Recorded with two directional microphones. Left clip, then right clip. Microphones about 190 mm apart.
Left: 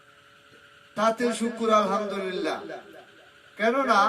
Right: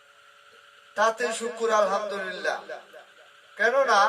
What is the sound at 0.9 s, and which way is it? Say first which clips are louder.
A man's voice: even; 30° right (ahead or behind).